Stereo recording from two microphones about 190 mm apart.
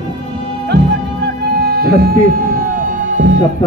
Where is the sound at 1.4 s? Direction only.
55° right (ahead or behind).